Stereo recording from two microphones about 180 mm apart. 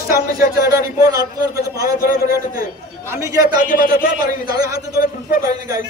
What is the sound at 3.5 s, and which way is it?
Speech, 50° left (ahead or behind).